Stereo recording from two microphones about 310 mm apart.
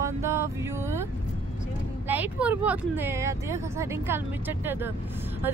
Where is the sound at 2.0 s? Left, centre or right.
Centre.